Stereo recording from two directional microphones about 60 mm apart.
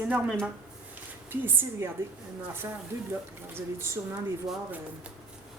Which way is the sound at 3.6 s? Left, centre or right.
Right.